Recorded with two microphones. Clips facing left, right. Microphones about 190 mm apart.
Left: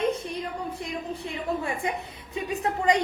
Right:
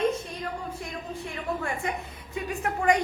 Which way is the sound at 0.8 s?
20° left (ahead or behind).